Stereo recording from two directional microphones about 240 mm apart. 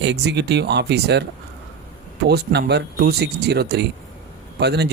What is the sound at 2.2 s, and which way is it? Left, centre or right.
Speech, right.